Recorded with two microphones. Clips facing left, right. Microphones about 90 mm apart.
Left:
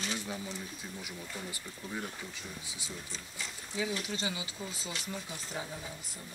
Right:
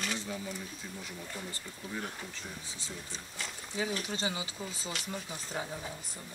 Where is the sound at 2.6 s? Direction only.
15° left (ahead or behind).